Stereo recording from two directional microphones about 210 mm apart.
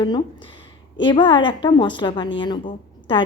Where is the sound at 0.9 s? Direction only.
20° left (ahead or behind).